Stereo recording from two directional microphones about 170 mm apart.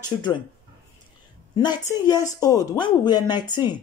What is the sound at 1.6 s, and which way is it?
Speech, 25° left (ahead or behind).